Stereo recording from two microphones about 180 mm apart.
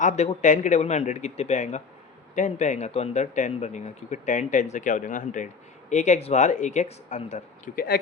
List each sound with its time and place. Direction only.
0.0 s speech: 40° left (ahead or behind)